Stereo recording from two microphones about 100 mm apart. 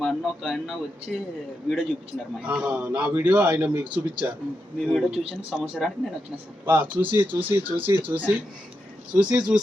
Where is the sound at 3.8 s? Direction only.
55° right (ahead or behind).